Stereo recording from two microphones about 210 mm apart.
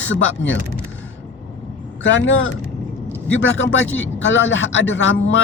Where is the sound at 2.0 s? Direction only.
60° left (ahead or behind).